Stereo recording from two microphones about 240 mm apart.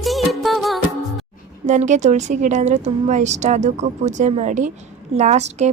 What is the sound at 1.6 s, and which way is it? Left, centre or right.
A woman's voice, right.